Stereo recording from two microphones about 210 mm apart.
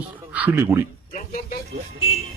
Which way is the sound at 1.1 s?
40° left (ahead or behind).